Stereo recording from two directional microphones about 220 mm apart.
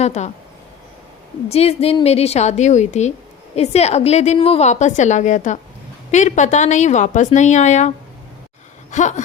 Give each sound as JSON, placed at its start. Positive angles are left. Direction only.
{"t": 0.0, "sound": "a woman's voice", "side_deg": 30}
{"t": 1.5, "sound": "a woman's voice", "side_deg": 30}